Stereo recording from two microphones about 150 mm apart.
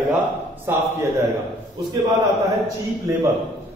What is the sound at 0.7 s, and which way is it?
Speech, 15° right (ahead or behind).